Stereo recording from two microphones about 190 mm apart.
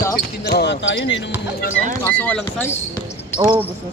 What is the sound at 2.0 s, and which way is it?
Speech, 10° left (ahead or behind).